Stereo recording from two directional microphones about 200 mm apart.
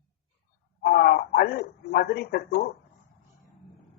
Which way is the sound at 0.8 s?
50° left (ahead or behind).